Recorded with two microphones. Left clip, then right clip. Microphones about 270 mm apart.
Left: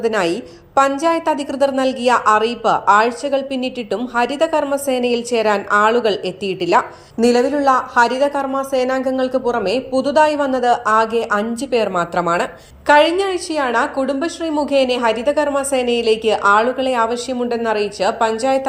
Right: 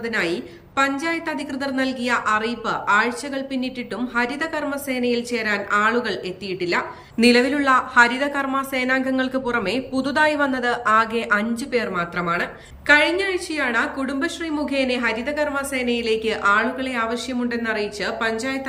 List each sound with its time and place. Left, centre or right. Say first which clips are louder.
0.0 s a woman's voice: left 6 dB; centre
7.3 s a woman's voice: left 3 dB; centre
7.9 s a man's voice: left 2 dB; centre
8.3 s a woman's voice: left 4 dB; centre
9.5 s a man's voice: left 5 dB; centre